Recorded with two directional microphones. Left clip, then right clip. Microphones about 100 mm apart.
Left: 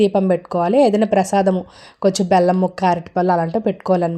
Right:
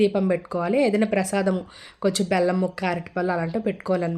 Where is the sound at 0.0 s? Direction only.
40° left (ahead or behind).